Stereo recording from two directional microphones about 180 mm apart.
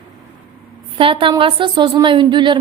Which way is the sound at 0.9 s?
30° right (ahead or behind).